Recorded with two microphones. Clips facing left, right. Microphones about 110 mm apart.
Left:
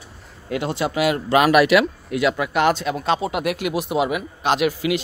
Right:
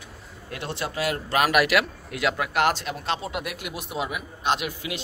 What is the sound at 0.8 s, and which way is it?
Speech, 90° left.